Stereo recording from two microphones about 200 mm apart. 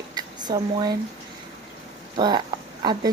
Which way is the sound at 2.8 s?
20° right (ahead or behind).